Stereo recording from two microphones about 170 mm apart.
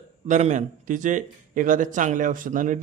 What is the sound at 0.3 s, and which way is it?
A man's voice, 45° right (ahead or behind).